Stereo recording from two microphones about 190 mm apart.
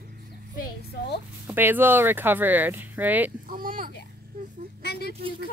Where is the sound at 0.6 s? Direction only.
55° left (ahead or behind).